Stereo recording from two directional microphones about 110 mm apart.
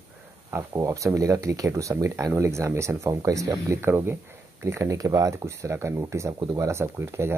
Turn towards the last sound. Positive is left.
turn(degrees=-25)  # may be behind; listen again after turning